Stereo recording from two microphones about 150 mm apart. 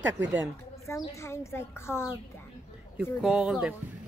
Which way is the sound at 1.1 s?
20° left (ahead or behind).